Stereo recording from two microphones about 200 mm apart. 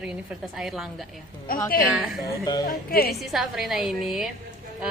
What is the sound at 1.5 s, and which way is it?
Speech, 45° left (ahead or behind).